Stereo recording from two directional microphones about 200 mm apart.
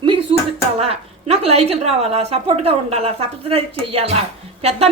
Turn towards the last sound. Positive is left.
turn(degrees=-30)  # may be behind; listen again after turning